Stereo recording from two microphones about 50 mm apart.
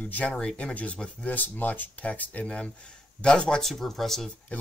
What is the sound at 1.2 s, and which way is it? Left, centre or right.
Speech, left.